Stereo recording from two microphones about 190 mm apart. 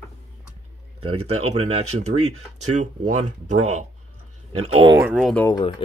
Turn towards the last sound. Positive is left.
turn(degrees=20)  # may be behind; listen again after turning